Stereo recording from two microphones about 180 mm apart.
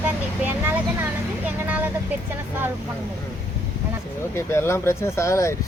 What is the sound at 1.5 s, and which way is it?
Vehicle, 10° right (ahead or behind).